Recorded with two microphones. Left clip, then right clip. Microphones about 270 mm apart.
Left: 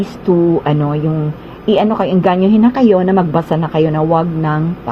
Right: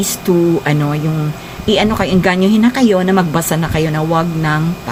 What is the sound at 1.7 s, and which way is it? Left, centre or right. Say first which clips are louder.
A woman's voice: left 1 dB; centre.